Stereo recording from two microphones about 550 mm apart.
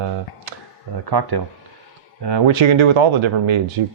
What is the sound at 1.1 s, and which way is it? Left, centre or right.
Speech, right.